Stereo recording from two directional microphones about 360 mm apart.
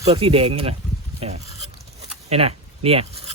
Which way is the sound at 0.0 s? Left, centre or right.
Centre.